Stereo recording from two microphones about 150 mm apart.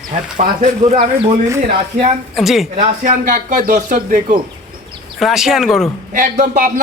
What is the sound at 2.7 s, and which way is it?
Speech, 60° right (ahead or behind).